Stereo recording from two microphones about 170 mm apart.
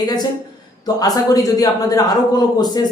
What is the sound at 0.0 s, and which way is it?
Speech, 25° left (ahead or behind).